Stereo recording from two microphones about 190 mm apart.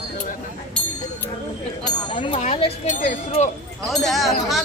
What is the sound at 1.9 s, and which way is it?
Speech, 25° left (ahead or behind).